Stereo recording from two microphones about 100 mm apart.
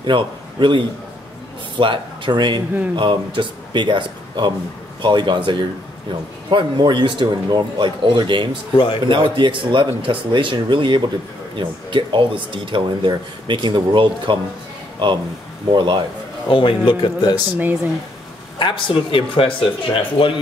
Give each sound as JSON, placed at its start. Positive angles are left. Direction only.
{"t": 0.0, "sound": "a man's voice", "side_deg": -55}
{"t": 8.7, "sound": "speech", "side_deg": 55}
{"t": 9.1, "sound": "speech", "side_deg": -55}
{"t": 16.4, "sound": "speech", "side_deg": 60}
{"t": 18.6, "sound": "speech", "side_deg": 55}